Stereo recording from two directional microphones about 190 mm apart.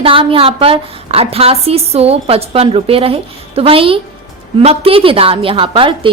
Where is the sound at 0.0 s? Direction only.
30° right (ahead or behind).